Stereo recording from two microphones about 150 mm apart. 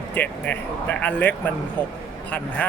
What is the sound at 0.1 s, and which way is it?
Speech, 10° left (ahead or behind).